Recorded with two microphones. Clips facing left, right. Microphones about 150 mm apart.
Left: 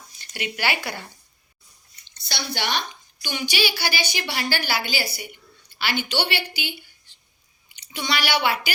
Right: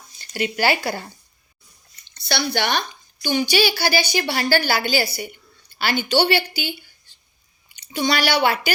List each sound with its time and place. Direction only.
0.2 s speech: 35° right (ahead or behind)
2.0 s speech: 65° right (ahead or behind)
3.2 s a woman's voice: 35° right (ahead or behind)
7.8 s a woman's voice: 40° right (ahead or behind)